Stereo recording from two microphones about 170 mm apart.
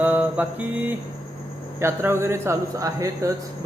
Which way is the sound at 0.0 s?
10° right (ahead or behind).